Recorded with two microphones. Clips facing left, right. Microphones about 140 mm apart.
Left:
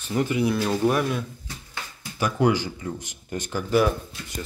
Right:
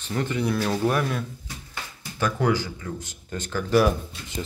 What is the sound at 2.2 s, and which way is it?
Speech, 15° left (ahead or behind).